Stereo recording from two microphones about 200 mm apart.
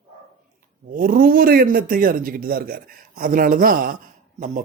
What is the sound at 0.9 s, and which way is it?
A man's voice, 45° right (ahead or behind).